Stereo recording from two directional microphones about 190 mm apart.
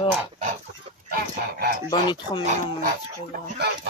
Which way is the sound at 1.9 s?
25° left (ahead or behind).